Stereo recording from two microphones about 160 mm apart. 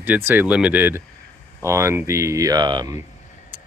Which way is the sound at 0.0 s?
10° right (ahead or behind).